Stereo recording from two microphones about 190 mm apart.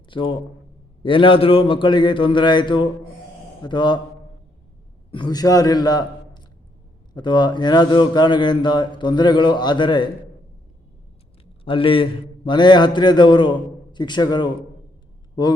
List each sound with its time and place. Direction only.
0.1 s a man's voice: 25° left (ahead or behind)
5.1 s speech: 20° left (ahead or behind)
11.6 s a man's voice: 25° left (ahead or behind)